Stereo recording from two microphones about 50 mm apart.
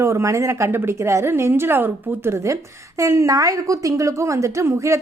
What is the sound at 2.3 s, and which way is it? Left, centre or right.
A woman's voice, right.